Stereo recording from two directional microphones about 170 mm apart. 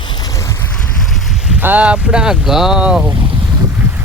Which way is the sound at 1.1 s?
5° right (ahead or behind).